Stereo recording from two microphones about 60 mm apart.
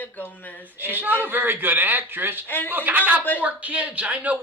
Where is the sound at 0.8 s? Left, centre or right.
Right.